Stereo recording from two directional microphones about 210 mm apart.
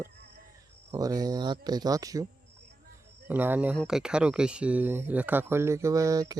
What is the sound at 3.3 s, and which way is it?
Speech, 10° right (ahead or behind).